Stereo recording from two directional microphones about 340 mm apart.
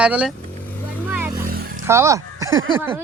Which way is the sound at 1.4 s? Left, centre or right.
Right.